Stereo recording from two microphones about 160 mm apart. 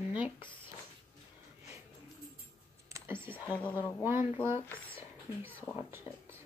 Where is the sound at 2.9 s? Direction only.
15° right (ahead or behind).